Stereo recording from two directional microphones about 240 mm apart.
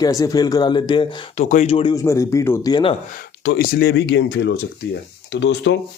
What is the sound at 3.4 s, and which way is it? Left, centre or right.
Speech, left.